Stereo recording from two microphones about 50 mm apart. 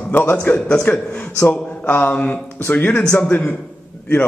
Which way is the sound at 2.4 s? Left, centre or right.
Left.